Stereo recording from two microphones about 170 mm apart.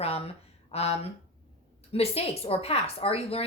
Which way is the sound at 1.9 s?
35° left (ahead or behind).